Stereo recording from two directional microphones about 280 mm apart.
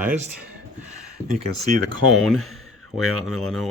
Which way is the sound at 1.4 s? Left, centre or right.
Right.